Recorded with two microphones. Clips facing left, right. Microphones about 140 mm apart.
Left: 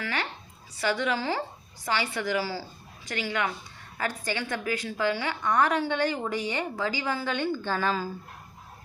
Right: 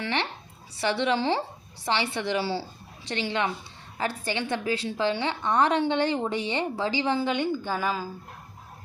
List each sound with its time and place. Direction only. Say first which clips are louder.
0.0 s a woman's voice: right 3 dB; 25° right (ahead or behind); by 8.1 s 10° right (ahead or behind)